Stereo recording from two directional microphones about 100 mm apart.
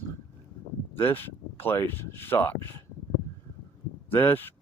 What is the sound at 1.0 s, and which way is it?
Speech, 20° left (ahead or behind).